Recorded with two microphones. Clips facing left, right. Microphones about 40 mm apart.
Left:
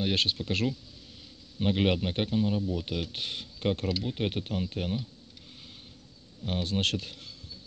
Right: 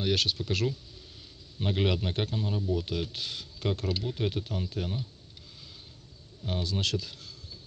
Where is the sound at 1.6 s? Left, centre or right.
Centre.